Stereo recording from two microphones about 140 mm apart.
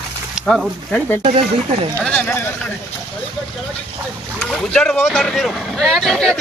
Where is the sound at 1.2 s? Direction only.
45° right (ahead or behind).